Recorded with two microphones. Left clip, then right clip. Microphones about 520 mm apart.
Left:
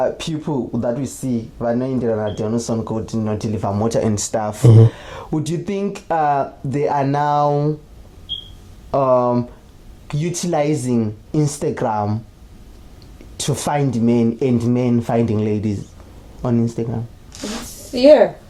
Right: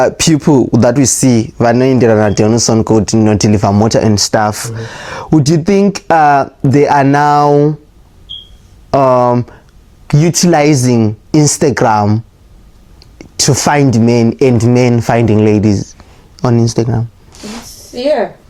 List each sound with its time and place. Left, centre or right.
0.0 s speech: right
8.9 s speech: right
13.3 s speech: right